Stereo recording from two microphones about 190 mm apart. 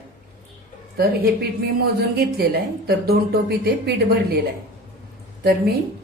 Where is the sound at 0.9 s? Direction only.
55° right (ahead or behind).